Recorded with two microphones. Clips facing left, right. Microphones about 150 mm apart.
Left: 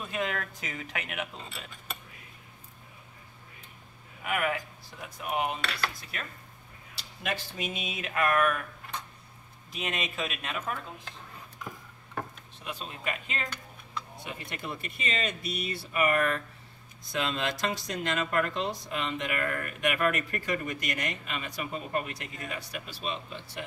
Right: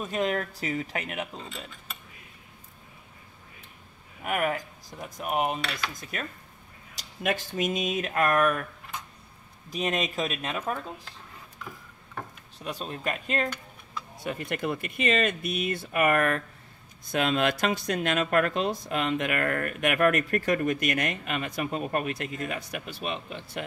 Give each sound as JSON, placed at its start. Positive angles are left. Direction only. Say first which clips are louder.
{"t": 0.0, "sound": "speech", "louder": "right 5 dB", "side_deg": -40}
{"t": 4.2, "sound": "dishes", "louder": "right 2 dB", "side_deg": -40}
{"t": 9.7, "sound": "speech", "louder": "right 6 dB", "side_deg": -40}
{"t": 12.6, "sound": "speech", "louder": "right 4 dB", "side_deg": -40}
{"t": 14.2, "sound": "speech", "louder": "right 12 dB", "side_deg": -55}